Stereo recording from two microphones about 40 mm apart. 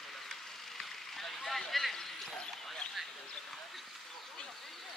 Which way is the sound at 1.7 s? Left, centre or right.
Centre.